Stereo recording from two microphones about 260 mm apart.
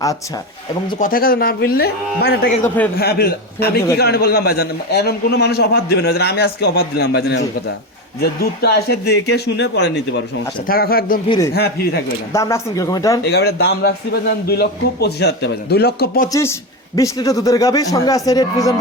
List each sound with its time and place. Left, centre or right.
0.9 s a man's voice: left
11.3 s speech: centre
11.5 s a man's voice: left
12.3 s speech: centre
13.2 s a man's voice: left
16.3 s speech: centre